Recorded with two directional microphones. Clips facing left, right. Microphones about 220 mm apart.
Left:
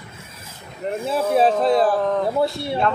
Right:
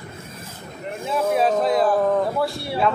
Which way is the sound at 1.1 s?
30° left (ahead or behind).